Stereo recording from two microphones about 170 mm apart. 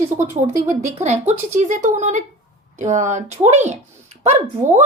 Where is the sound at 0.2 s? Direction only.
50° right (ahead or behind).